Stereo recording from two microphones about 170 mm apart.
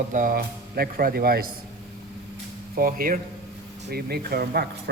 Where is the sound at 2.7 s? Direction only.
55° right (ahead or behind).